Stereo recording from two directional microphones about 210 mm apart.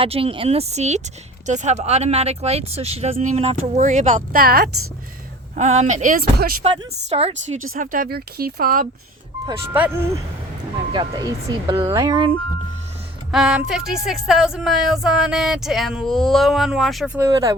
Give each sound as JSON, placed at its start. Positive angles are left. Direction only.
{"t": 0.0, "sound": "speech", "side_deg": -25}
{"t": 5.5, "sound": "speech", "side_deg": -35}
{"t": 6.6, "sound": "speech", "side_deg": -30}
{"t": 7.7, "sound": "speech", "side_deg": -40}
{"t": 9.7, "sound": "speech", "side_deg": -10}
{"t": 10.9, "sound": "speech", "side_deg": -20}
{"t": 13.3, "sound": "music", "side_deg": 0}
{"t": 17.2, "sound": "speech", "side_deg": -15}